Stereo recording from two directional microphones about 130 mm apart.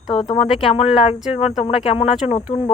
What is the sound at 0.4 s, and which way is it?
Speech, 45° left (ahead or behind).